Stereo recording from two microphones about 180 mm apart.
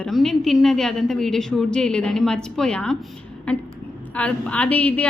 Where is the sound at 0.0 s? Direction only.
Centre (ahead or behind).